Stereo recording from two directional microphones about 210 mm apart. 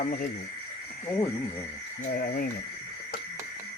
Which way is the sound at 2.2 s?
45° left (ahead or behind).